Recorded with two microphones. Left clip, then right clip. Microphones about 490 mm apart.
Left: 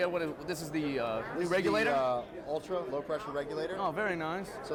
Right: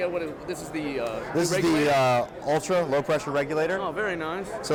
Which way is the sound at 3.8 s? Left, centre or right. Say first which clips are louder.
Right 4 dB; left.